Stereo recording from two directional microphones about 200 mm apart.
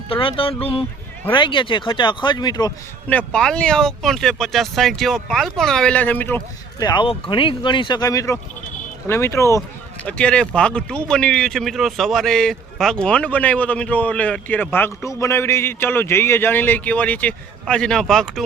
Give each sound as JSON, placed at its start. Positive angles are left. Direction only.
{"t": 0.1, "sound": "speech", "side_deg": 25}
{"t": 3.1, "sound": "speech", "side_deg": 5}